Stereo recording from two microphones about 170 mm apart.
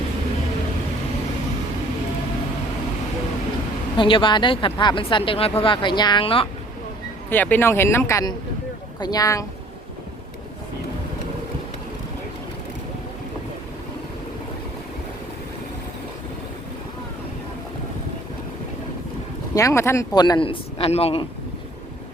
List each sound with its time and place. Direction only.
3.9 s speech: 30° left (ahead or behind)
7.3 s speech: 10° left (ahead or behind)
19.5 s speech: 15° left (ahead or behind); by 21.2 s 35° left (ahead or behind)